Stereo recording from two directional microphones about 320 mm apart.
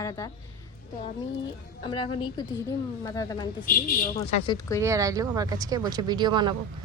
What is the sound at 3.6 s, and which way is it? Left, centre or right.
Speech, left.